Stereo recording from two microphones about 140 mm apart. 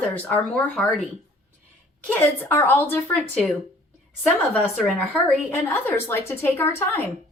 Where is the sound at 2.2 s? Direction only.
15° left (ahead or behind).